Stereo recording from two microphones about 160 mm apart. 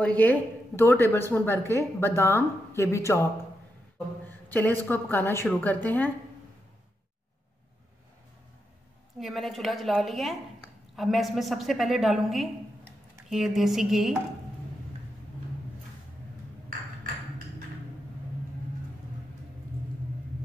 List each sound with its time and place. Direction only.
0.0 s a woman's voice: 10° left (ahead or behind)
4.3 s a woman's voice: 10° left (ahead or behind)
9.2 s a woman's voice: centre (ahead or behind)